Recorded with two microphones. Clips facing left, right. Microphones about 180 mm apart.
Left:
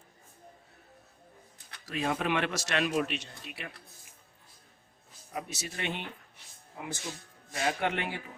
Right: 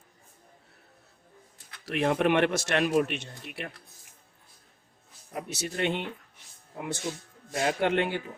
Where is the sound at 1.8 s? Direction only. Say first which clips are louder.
Right 6 dB; 65° right (ahead or behind).